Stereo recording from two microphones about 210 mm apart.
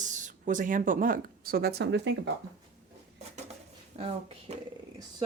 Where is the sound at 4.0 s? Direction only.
30° right (ahead or behind).